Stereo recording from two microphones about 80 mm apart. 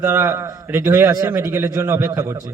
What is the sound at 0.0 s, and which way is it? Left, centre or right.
A man's voice, right.